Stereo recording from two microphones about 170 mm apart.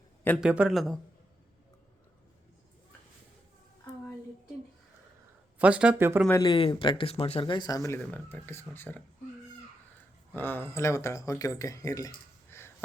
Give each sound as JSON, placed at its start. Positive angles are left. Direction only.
{"t": 0.3, "sound": "speech", "side_deg": -5}
{"t": 5.5, "sound": "speech", "side_deg": -5}
{"t": 6.4, "sound": "speech", "side_deg": 30}
{"t": 10.3, "sound": "speech", "side_deg": 10}